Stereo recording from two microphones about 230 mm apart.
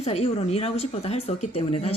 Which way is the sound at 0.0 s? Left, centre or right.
Left.